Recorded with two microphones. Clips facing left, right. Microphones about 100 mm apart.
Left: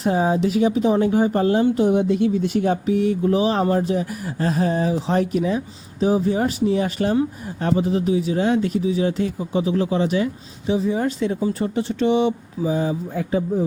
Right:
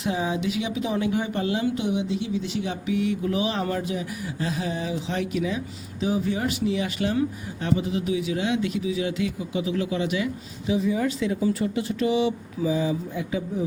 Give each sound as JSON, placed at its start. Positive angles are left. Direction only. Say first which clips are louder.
{"t": 0.0, "sound": "speech", "louder": "left 7 dB", "side_deg": 40}
{"t": 12.1, "sound": "speech", "louder": "left 4 dB", "side_deg": 45}